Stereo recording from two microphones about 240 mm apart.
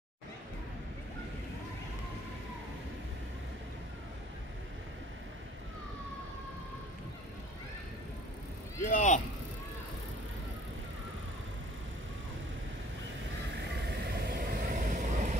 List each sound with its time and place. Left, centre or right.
8.8 s vehicle: left
13.7 s vehicle: right